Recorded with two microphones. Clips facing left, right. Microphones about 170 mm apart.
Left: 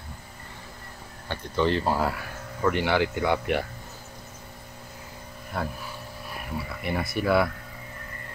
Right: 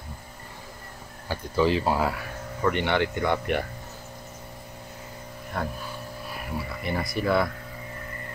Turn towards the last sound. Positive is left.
turn(degrees=5)  # may be behind; listen again after turning